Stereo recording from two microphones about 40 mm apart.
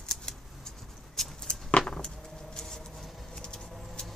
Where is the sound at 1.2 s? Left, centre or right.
Centre.